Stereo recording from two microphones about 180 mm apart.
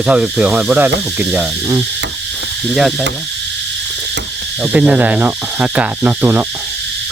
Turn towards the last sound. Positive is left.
turn(degrees=-10)  # may be behind; listen again after turning